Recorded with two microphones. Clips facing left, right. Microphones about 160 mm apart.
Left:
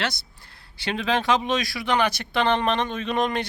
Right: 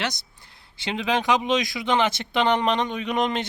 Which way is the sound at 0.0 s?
20° right (ahead or behind).